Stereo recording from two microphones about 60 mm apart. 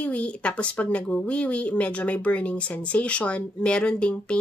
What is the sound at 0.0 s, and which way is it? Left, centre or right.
Speech, left.